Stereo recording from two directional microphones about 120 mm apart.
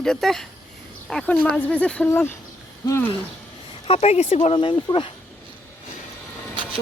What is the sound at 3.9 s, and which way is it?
Speech, 65° left (ahead or behind).